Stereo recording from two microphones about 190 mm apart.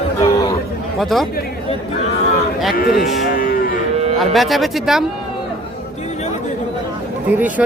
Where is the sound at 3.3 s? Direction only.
45° left (ahead or behind).